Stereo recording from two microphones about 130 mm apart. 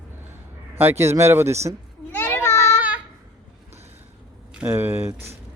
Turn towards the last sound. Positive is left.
turn(degrees=-20)  # may be behind; listen again after turning